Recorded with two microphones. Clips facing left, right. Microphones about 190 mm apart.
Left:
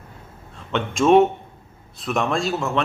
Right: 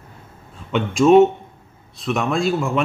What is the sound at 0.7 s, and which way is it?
A man's voice, 5° right (ahead or behind).